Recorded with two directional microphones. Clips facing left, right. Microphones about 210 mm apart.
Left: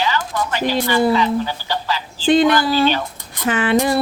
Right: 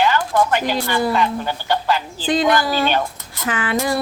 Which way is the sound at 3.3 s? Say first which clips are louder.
Left 6 dB; 25° left (ahead or behind).